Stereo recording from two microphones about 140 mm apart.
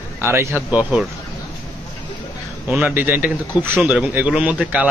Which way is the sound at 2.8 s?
10° right (ahead or behind).